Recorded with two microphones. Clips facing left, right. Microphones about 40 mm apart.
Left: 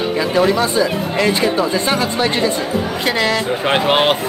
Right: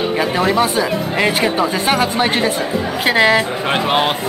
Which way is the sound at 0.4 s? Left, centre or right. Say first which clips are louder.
Left 2 dB; right.